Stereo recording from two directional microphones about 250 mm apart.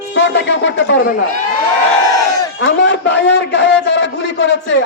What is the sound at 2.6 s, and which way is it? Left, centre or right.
A man's voice, left.